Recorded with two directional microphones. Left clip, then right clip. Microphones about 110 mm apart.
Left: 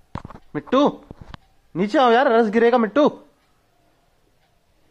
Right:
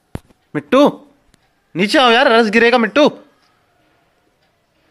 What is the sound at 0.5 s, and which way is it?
Speech, 20° right (ahead or behind).